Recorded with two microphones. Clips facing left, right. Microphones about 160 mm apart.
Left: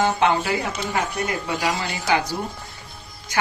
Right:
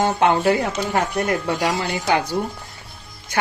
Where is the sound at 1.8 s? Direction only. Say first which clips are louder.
Right 2 dB; 55° right (ahead or behind).